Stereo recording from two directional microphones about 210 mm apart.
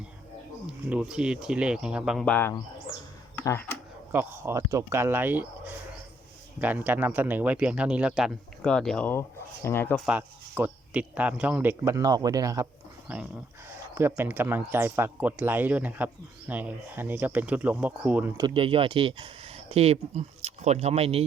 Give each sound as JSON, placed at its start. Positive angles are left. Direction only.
{"t": 0.7, "sound": "speech", "side_deg": -5}
{"t": 3.3, "sound": "a sound", "side_deg": 10}
{"t": 4.1, "sound": "speech", "side_deg": -10}
{"t": 10.1, "sound": "speech", "side_deg": -10}
{"t": 13.7, "sound": "speech", "side_deg": -10}
{"t": 18.3, "sound": "speech", "side_deg": -25}